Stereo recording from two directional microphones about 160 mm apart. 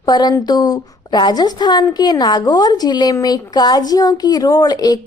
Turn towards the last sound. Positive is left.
turn(degrees=25)  # may be behind; listen again after turning